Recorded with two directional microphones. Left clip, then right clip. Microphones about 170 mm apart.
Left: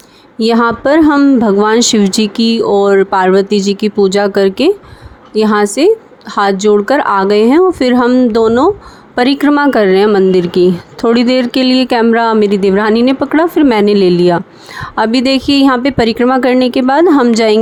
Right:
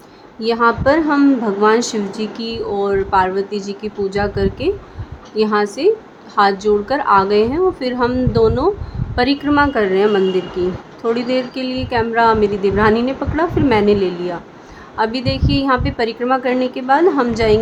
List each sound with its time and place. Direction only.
0.3 s speech: 50° left (ahead or behind)